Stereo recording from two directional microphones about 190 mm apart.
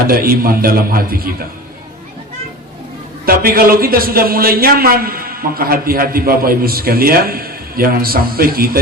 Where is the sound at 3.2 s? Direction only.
50° right (ahead or behind).